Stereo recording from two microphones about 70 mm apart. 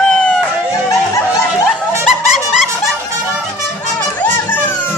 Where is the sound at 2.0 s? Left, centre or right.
Centre.